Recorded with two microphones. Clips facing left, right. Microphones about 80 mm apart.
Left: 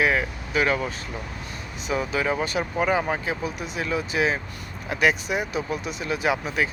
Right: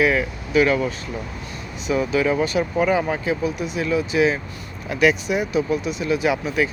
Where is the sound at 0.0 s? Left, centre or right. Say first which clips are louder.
Right 3 dB; left.